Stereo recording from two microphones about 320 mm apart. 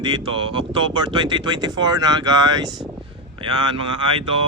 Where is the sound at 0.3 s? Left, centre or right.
Centre.